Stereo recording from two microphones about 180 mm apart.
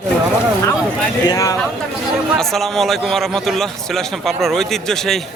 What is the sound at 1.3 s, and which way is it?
Speech, 20° left (ahead or behind).